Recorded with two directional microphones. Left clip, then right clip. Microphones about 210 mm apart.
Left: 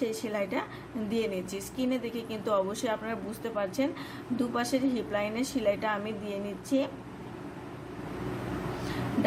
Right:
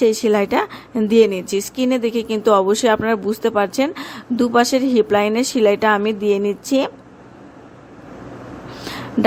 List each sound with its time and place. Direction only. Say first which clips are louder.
0.0 s speech: right 16 dB; 50° right (ahead or behind)